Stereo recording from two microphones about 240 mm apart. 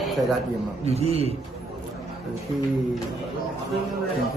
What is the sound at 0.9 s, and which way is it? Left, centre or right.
Speech, right.